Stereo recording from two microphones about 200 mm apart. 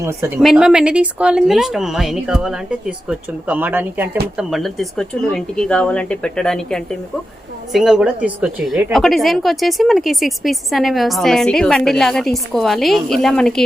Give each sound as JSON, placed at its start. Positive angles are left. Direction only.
{"t": 0.0, "sound": "a woman's voice", "side_deg": -15}
{"t": 0.3, "sound": "a woman's voice", "side_deg": 0}